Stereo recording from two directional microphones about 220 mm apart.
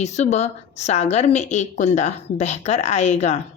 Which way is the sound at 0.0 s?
30° left (ahead or behind).